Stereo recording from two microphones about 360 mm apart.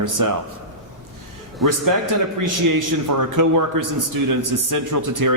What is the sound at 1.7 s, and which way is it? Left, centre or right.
A man's voice, right.